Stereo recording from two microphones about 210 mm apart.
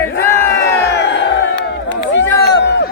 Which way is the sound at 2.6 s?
55° left (ahead or behind).